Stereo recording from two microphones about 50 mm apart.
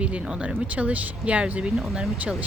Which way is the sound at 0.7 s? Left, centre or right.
Right.